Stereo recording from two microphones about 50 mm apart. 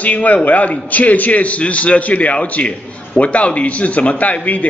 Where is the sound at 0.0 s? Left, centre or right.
Left.